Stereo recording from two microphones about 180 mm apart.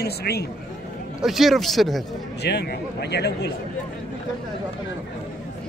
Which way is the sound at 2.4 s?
65° left (ahead or behind).